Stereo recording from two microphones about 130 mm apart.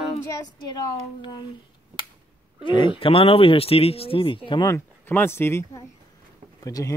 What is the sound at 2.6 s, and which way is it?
Speech, 40° left (ahead or behind).